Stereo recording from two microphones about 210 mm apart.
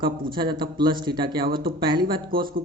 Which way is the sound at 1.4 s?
45° right (ahead or behind).